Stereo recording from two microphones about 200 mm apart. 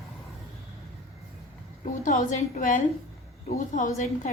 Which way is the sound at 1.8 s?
40° left (ahead or behind).